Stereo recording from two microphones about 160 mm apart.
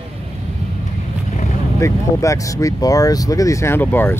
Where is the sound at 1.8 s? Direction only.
20° left (ahead or behind).